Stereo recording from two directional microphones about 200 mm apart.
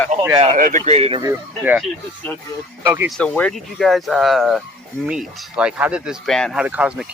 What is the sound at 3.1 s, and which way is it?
Speech, 5° left (ahead or behind).